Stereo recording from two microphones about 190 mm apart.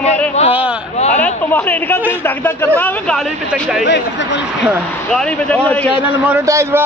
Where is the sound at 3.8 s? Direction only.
70° left (ahead or behind).